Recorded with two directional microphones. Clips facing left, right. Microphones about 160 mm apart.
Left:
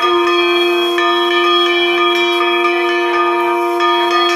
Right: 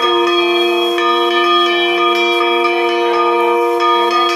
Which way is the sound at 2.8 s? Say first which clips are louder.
Right 1 dB; 30° right (ahead or behind).